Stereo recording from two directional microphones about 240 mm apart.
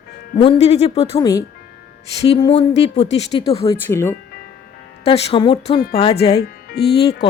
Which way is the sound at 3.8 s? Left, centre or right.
Centre.